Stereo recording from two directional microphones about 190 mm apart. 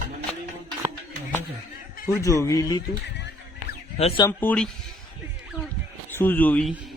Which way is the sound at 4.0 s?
30° left (ahead or behind).